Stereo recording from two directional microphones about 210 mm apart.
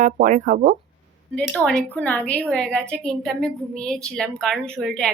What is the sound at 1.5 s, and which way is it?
A woman's voice, 5° left (ahead or behind).